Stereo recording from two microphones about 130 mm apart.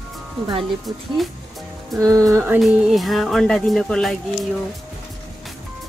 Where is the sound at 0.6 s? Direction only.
Centre (ahead or behind).